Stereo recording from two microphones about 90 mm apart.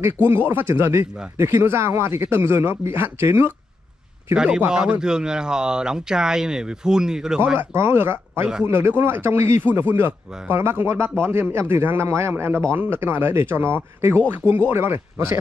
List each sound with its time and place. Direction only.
0.0 s speech: 25° right (ahead or behind)
4.6 s speech: 10° right (ahead or behind)
7.5 s speech: 25° right (ahead or behind)